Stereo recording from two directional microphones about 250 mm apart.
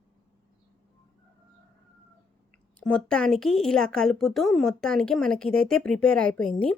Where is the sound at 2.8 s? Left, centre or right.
Centre.